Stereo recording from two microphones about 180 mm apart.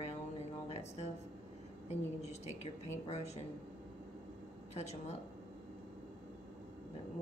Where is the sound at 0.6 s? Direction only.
35° left (ahead or behind).